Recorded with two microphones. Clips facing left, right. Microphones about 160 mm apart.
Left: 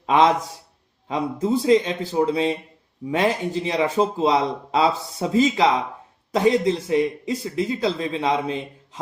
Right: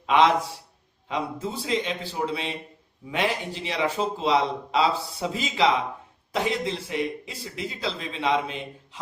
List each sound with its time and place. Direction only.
0.0 s a man's voice: 40° left (ahead or behind)